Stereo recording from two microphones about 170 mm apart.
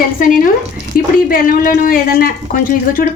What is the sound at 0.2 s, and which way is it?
A woman's voice, 55° left (ahead or behind).